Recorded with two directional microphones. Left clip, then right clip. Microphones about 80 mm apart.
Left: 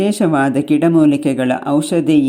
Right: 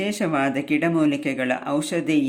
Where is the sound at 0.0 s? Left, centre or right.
Left.